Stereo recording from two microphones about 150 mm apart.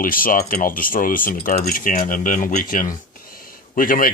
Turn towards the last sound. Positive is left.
turn(degrees=65)  # may be behind; listen again after turning